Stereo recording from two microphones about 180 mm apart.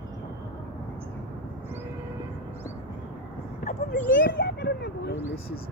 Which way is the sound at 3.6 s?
50° left (ahead or behind).